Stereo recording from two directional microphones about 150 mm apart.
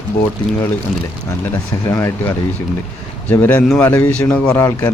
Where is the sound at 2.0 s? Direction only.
20° left (ahead or behind).